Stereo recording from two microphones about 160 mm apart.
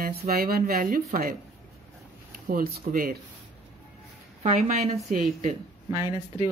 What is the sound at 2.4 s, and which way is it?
Speech, 65° right (ahead or behind).